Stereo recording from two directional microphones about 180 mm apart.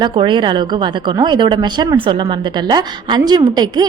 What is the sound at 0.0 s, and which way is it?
A woman's voice, 25° right (ahead or behind).